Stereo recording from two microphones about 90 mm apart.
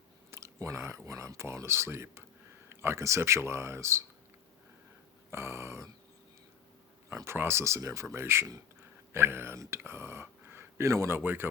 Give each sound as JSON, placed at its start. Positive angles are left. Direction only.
{"t": 0.3, "sound": "speech", "side_deg": -30}
{"t": 5.3, "sound": "speech", "side_deg": -30}
{"t": 7.1, "sound": "speech", "side_deg": -30}